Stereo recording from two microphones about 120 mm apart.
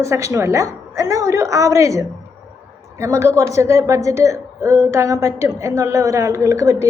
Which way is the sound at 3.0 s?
25° right (ahead or behind).